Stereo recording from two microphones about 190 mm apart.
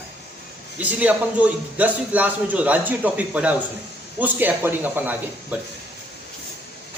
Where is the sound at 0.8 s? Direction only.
10° right (ahead or behind).